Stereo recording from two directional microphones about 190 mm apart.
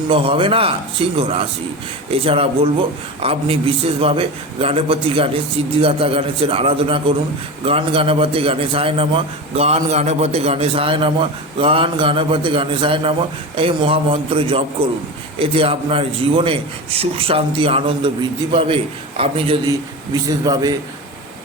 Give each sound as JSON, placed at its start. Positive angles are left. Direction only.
{"t": 0.1, "sound": "a man's voice", "side_deg": -30}